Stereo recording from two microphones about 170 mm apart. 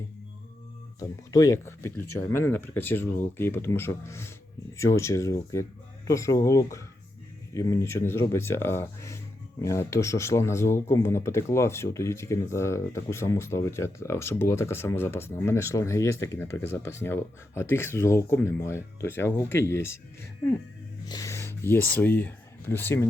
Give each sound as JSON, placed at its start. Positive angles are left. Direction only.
{"t": 0.9, "sound": "speech", "side_deg": 20}
{"t": 21.1, "sound": "speech", "side_deg": 20}